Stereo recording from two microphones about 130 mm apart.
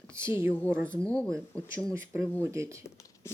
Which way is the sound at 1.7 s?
20° right (ahead or behind).